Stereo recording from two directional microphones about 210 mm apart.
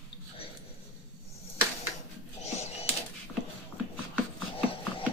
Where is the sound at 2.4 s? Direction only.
30° left (ahead or behind).